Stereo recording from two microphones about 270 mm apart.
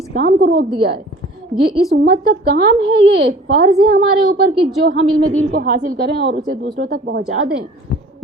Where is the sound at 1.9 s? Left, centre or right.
Right.